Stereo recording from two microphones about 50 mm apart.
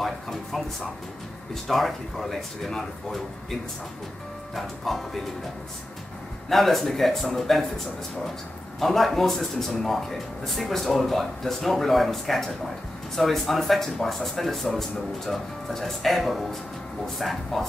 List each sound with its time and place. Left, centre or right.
0.0 s music: centre
1.5 s speech: centre
4.6 s speech: centre
6.5 s speech: centre
8.7 s speech: centre